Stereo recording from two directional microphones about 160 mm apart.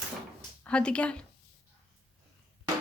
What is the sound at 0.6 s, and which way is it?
Speech, 5° left (ahead or behind).